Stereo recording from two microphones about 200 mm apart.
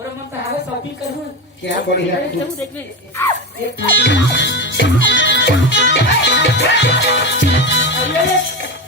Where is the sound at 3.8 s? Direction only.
65° left (ahead or behind).